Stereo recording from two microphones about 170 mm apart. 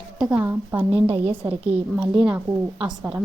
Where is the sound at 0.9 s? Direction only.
35° right (ahead or behind).